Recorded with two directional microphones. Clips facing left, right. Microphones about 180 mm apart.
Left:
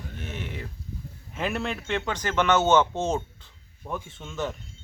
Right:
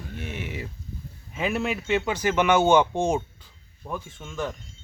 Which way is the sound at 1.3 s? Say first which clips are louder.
Right 3 dB; 5° right (ahead or behind).